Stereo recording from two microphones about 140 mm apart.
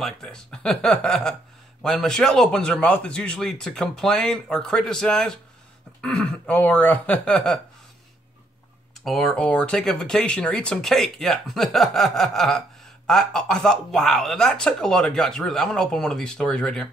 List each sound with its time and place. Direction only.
0.0 s speech: 5° left (ahead or behind)
9.0 s speech: 5° left (ahead or behind)